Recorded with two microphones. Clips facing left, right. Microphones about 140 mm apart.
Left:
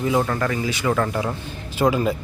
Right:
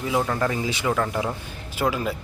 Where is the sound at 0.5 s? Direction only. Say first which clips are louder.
Left 2 dB; 20° right (ahead or behind).